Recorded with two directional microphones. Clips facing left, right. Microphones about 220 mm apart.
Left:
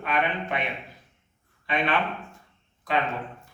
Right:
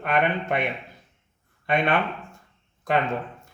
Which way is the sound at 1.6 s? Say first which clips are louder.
Right 4 dB; 45° right (ahead or behind).